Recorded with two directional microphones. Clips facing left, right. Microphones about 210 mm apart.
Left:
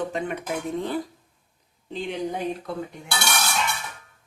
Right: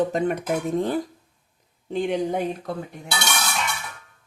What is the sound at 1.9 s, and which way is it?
Speech, 50° right (ahead or behind).